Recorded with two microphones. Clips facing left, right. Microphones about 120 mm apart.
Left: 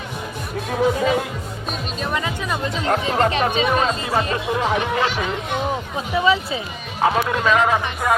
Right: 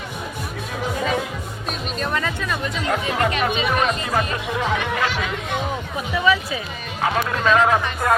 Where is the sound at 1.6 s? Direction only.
Centre (ahead or behind).